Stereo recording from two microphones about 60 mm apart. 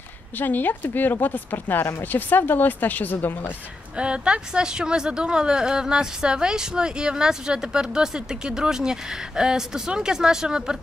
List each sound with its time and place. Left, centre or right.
0.4 s speech: left
3.9 s speech: centre